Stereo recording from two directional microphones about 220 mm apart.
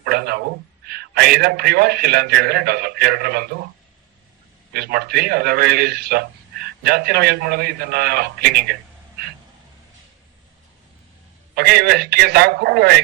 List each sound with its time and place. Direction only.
0.0 s a man's voice: 45° right (ahead or behind)
4.7 s a man's voice: 45° right (ahead or behind)
11.5 s a man's voice: 45° right (ahead or behind)